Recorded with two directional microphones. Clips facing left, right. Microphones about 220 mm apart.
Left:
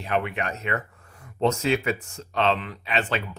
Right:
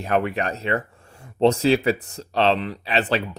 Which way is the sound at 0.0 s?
40° right (ahead or behind).